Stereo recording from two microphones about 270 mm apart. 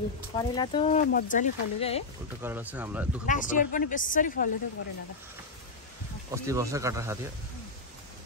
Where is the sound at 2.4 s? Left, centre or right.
Centre.